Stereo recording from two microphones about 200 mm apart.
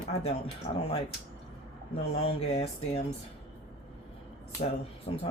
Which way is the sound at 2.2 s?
30° left (ahead or behind).